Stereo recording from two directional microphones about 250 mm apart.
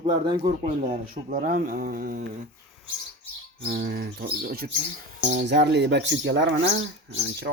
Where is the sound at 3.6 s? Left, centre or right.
Right.